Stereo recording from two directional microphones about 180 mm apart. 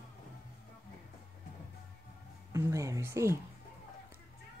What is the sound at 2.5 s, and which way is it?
Speech, 15° right (ahead or behind).